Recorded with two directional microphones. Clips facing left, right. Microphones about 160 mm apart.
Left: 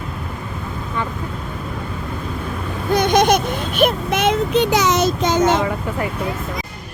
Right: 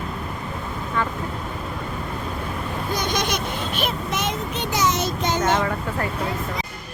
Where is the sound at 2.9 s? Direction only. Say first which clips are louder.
Left 11 dB; 55° left (ahead or behind); by 5.4 s 90° left.